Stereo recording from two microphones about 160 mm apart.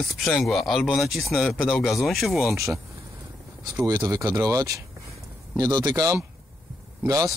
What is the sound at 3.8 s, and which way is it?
Speech, 25° right (ahead or behind).